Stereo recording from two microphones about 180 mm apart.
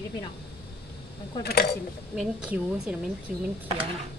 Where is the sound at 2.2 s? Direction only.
5° right (ahead or behind).